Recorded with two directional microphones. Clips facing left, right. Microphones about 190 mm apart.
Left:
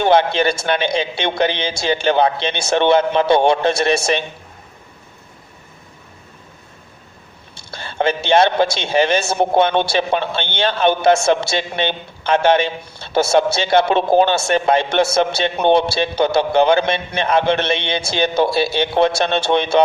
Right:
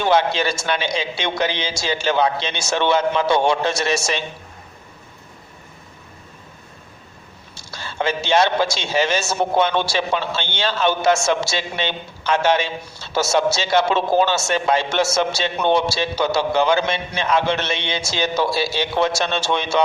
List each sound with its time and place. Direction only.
0.0 s a man's voice: 55° left (ahead or behind)
7.5 s a man's voice: 55° left (ahead or behind)